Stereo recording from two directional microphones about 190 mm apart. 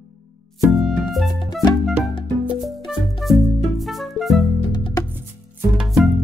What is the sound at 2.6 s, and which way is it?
Music, centre (ahead or behind).